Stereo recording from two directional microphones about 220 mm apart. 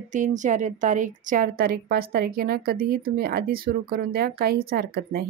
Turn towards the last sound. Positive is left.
turn(degrees=-45)  # may be behind; listen again after turning